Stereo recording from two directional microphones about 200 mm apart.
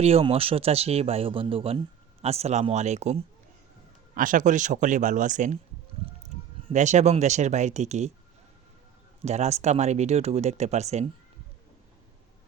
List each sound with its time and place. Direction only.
0.0 s speech: 30° right (ahead or behind)
6.7 s speech: 35° right (ahead or behind)
9.2 s speech: 35° right (ahead or behind)